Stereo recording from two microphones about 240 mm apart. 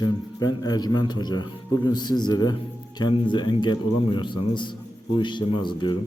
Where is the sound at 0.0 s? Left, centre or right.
Centre.